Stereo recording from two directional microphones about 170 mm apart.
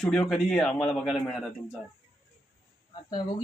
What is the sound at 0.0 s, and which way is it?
A man's voice, 5° left (ahead or behind).